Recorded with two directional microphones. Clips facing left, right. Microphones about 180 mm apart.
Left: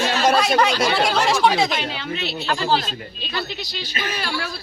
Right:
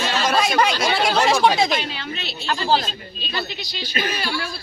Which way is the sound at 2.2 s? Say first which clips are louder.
Left 2 dB; 60° left (ahead or behind).